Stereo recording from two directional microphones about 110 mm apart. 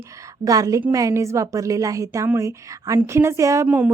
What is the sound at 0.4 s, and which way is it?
A woman's voice, 30° right (ahead or behind).